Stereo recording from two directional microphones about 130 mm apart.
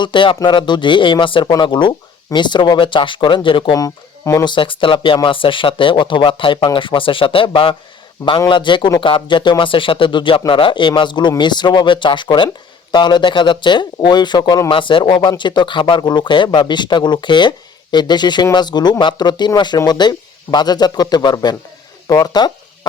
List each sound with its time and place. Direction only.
0.0 s speech: 40° left (ahead or behind)
3.8 s speech: 25° left (ahead or behind)
4.5 s speech: 40° left (ahead or behind)